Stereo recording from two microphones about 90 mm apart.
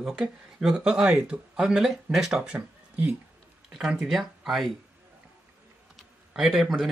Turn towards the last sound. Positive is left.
turn(degrees=-5)  # may be behind; listen again after turning